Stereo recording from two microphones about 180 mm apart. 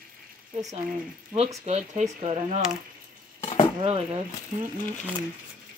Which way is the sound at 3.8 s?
30° right (ahead or behind).